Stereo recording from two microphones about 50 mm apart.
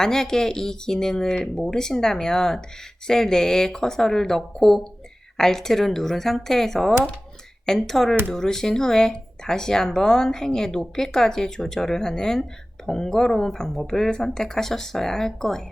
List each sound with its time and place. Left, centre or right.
0.0 s speech: centre